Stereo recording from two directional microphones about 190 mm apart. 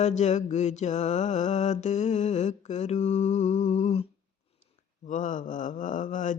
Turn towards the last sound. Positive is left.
turn(degrees=40)  # may be behind; listen again after turning